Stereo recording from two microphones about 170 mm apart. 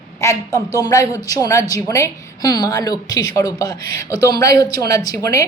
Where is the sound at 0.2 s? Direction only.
20° left (ahead or behind).